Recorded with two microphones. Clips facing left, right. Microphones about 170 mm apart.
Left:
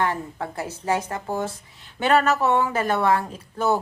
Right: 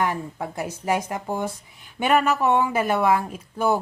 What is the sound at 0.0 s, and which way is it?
A woman's voice, 15° right (ahead or behind).